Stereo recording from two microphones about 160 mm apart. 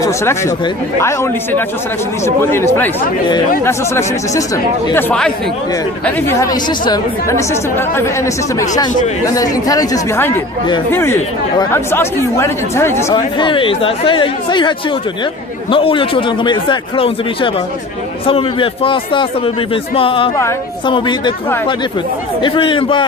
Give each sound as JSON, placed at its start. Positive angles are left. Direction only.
{"t": 0.0, "sound": "speech", "side_deg": 20}
{"t": 13.1, "sound": "a man's voice", "side_deg": 30}
{"t": 15.7, "sound": "a man's voice", "side_deg": 35}
{"t": 22.4, "sound": "a man's voice", "side_deg": 30}